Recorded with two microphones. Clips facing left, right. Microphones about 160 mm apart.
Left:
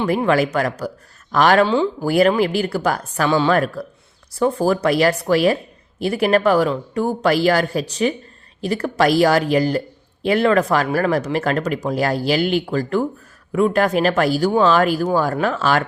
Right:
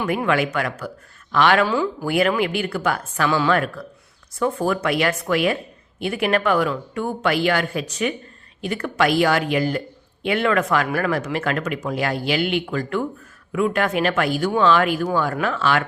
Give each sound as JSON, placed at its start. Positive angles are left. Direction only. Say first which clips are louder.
{"t": 0.0, "sound": "speech", "louder": "left 4 dB", "side_deg": 30}
{"t": 1.6, "sound": "speech", "louder": "left 4 dB", "side_deg": 25}